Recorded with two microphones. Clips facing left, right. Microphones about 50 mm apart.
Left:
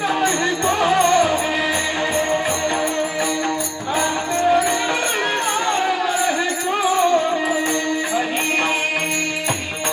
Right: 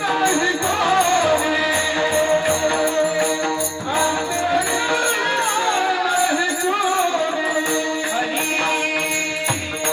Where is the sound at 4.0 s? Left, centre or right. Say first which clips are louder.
Even; left.